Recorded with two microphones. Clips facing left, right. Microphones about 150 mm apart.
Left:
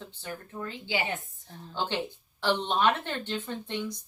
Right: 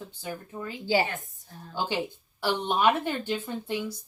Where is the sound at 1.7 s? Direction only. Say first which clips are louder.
Right 2 dB; 10° right (ahead or behind).